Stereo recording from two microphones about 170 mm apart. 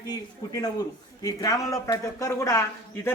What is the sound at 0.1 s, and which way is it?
A man's voice, 25° left (ahead or behind).